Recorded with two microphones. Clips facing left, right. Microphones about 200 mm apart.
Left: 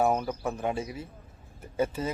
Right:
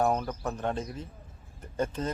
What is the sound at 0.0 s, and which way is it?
Speech, 5° left (ahead or behind).